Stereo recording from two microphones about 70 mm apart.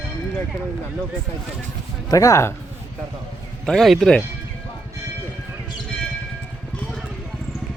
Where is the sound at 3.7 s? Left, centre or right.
Centre.